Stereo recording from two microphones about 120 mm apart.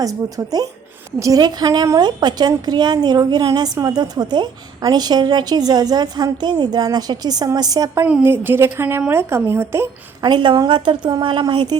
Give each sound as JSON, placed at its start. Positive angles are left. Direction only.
{"t": 0.0, "sound": "a woman's voice", "side_deg": -30}
{"t": 8.0, "sound": "a woman's voice", "side_deg": -15}
{"t": 10.2, "sound": "a woman's voice", "side_deg": -40}